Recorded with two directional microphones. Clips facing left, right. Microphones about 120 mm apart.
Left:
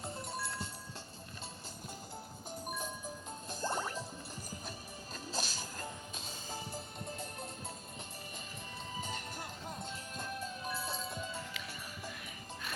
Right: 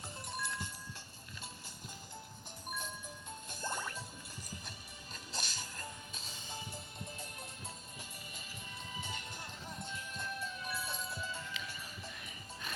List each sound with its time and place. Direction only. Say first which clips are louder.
0.3 s music: right 3 dB; 30° left (ahead or behind)
3.5 s music: left 5 dB; 35° left (ahead or behind)
5.1 s music: left 4 dB; 35° left (ahead or behind)
9.0 s music: left 4 dB; 40° left (ahead or behind)